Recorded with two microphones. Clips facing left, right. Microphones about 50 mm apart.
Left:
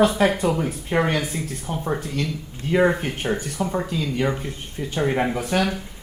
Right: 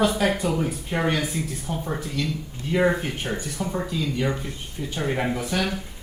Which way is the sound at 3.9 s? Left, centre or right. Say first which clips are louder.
Left 2 dB; left.